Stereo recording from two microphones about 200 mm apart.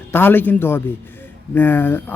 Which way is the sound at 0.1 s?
10° left (ahead or behind).